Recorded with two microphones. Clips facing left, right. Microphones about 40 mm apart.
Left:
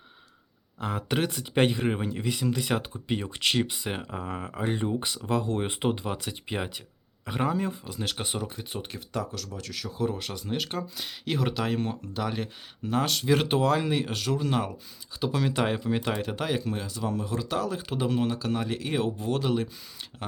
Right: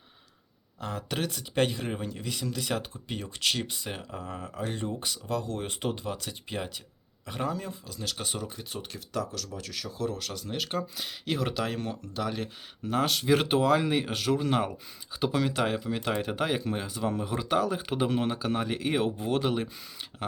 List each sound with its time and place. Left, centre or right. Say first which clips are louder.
0.8 s speech: left 4 dB; centre
10.0 s speech: left 3 dB; centre
10.6 s speech: right 1 dB; centre
15.4 s speech: left 2 dB; centre
16.0 s speech: even; centre